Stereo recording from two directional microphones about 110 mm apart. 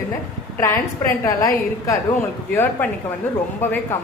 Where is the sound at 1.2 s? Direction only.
30° left (ahead or behind).